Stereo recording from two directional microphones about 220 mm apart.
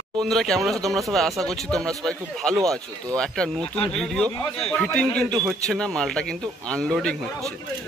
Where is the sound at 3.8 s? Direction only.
Centre (ahead or behind).